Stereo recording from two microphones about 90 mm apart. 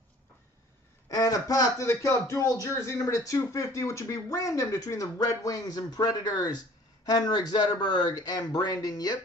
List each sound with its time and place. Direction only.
1.0 s a man's voice: 40° left (ahead or behind)